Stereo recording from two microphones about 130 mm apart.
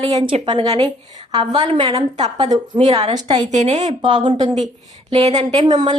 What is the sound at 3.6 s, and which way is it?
Speech, 60° right (ahead or behind).